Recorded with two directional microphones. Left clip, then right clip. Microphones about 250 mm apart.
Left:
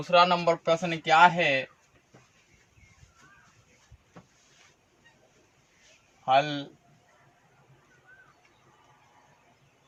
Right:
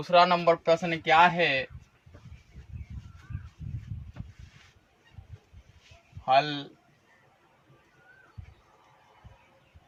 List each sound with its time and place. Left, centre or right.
0.0 s speech: centre
6.2 s speech: centre